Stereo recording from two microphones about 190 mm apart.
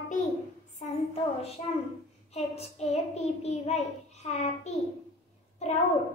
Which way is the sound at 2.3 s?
35° left (ahead or behind).